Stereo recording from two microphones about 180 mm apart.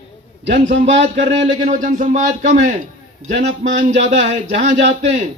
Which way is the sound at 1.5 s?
45° right (ahead or behind).